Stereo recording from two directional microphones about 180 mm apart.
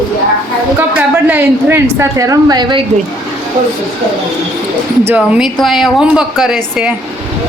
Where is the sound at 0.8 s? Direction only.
10° right (ahead or behind).